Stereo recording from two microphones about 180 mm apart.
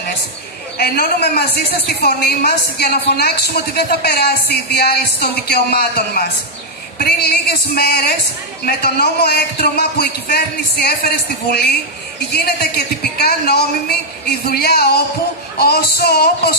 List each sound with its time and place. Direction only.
0.7 s a woman's voice: 60° left (ahead or behind)